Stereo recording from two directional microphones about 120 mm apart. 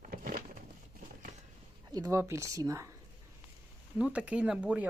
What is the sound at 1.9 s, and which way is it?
Speech, 30° right (ahead or behind).